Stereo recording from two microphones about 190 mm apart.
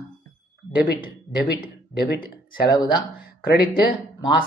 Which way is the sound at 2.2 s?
20° left (ahead or behind).